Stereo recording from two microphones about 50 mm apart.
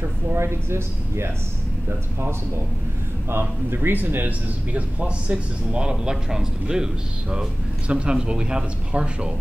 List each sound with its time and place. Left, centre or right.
0.3 s a man's voice: right
4.7 s speech: right